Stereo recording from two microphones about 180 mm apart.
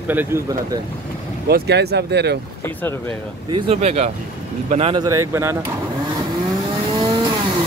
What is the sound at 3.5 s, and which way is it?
Speech, 35° right (ahead or behind).